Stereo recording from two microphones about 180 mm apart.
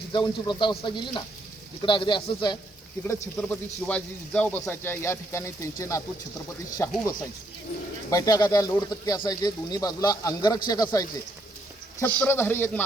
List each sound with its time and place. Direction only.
0.1 s speech: 25° left (ahead or behind)
3.4 s speech: 5° left (ahead or behind)
8.1 s speech: 20° left (ahead or behind)
12.2 s speech: 10° left (ahead or behind)